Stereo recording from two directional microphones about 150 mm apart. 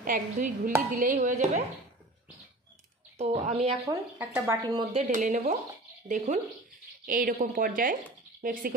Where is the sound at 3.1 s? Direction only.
45° right (ahead or behind).